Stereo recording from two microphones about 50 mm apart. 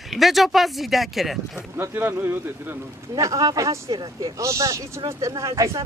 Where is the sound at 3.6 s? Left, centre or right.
Right.